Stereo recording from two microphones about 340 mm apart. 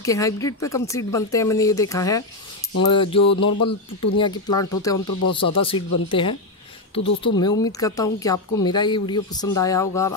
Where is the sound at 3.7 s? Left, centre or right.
Left.